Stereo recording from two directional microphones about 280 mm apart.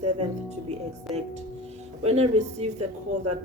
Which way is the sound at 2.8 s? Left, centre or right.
Right.